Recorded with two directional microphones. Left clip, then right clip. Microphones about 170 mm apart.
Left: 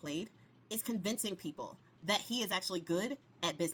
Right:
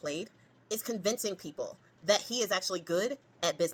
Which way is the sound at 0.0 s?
15° left (ahead or behind).